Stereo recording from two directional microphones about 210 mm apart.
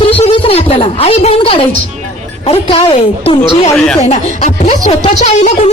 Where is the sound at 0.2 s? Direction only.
25° left (ahead or behind).